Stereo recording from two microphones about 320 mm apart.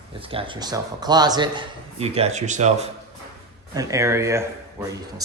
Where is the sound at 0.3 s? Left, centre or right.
Centre.